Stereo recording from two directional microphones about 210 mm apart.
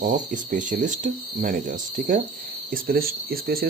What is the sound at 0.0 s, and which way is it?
Speech, 40° right (ahead or behind).